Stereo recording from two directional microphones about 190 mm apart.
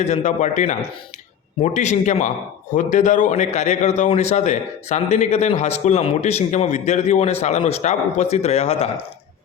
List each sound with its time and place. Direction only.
0.0 s a man's voice: 35° left (ahead or behind)